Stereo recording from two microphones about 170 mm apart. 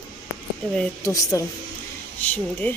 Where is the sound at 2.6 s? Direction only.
10° left (ahead or behind).